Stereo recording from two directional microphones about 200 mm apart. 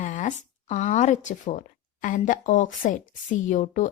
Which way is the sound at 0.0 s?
40° left (ahead or behind).